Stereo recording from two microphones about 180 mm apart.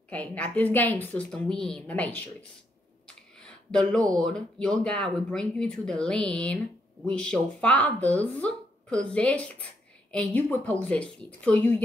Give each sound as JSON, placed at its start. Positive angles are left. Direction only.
{"t": 0.1, "sound": "a woman's voice", "side_deg": 5}
{"t": 3.3, "sound": "a woman's voice", "side_deg": 5}